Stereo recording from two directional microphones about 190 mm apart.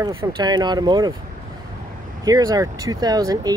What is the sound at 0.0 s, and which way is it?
Speech, 20° right (ahead or behind).